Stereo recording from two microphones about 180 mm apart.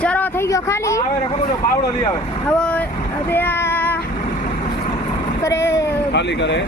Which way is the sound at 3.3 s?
10° left (ahead or behind).